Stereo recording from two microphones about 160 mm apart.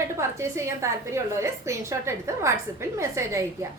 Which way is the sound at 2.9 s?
20° right (ahead or behind).